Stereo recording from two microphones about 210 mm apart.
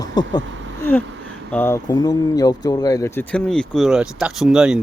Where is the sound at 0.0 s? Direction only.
20° left (ahead or behind).